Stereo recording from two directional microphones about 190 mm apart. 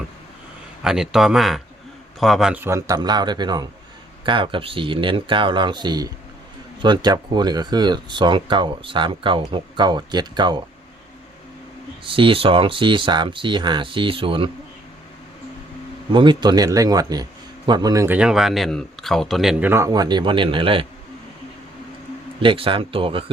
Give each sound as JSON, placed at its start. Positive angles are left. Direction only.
{"t": 0.8, "sound": "speech", "side_deg": 0}
{"t": 12.0, "sound": "speech", "side_deg": -30}
{"t": 16.1, "sound": "speech", "side_deg": -25}
{"t": 22.4, "sound": "speech", "side_deg": -30}